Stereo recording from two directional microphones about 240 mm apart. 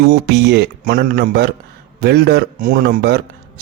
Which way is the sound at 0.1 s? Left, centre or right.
Right.